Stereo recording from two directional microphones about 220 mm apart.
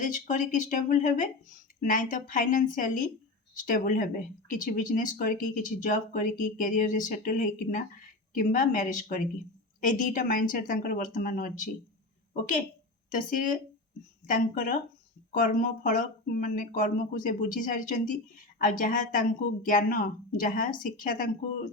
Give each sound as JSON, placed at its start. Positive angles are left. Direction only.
{"t": 0.0, "sound": "speech", "side_deg": 35}
{"t": 13.1, "sound": "speech", "side_deg": 35}